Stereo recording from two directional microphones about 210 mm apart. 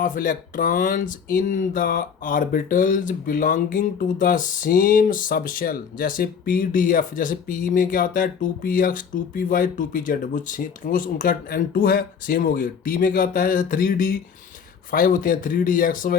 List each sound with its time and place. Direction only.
0.0 s speech: 40° left (ahead or behind)